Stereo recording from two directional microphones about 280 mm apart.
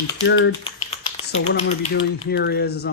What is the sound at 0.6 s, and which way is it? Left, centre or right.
Typing, centre.